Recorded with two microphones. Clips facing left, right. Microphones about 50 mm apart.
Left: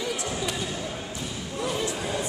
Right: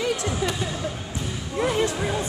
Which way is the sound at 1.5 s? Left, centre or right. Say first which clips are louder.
Right 6 dB; right.